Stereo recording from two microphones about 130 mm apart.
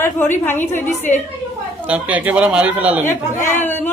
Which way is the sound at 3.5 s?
15° left (ahead or behind).